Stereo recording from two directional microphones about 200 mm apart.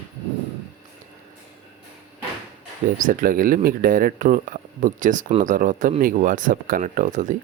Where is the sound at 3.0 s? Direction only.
40° right (ahead or behind).